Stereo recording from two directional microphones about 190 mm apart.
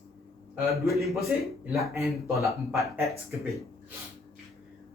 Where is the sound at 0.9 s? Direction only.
Centre (ahead or behind).